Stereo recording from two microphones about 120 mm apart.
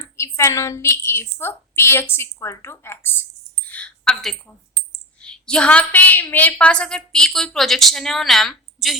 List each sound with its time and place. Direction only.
0.2 s a woman's voice: 25° left (ahead or behind)
3.7 s a sound: 10° left (ahead or behind)
6.3 s a woman's voice: 10° left (ahead or behind)